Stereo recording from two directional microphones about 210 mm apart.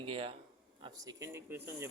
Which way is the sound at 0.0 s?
25° right (ahead or behind).